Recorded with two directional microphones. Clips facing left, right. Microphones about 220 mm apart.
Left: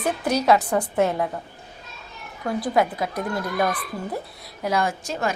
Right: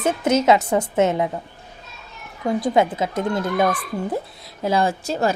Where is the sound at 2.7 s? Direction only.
25° right (ahead or behind).